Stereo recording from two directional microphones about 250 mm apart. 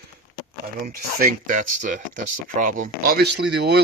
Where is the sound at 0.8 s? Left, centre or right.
Right.